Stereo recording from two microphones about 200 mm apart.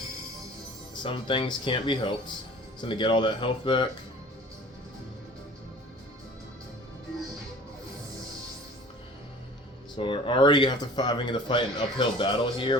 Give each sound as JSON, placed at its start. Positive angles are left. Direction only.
{"t": 1.0, "sound": "speech", "side_deg": 25}
{"t": 10.0, "sound": "speech", "side_deg": 25}